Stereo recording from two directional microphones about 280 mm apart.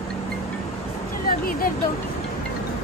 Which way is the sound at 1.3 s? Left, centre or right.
Left.